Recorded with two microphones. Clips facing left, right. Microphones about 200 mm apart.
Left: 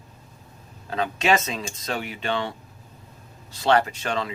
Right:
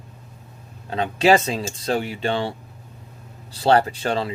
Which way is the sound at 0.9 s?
30° right (ahead or behind).